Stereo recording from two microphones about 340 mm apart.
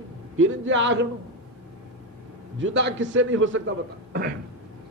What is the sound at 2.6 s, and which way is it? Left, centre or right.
A man's voice, right.